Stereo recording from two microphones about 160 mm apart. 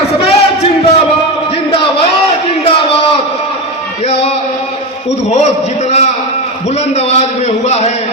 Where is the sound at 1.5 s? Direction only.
35° left (ahead or behind).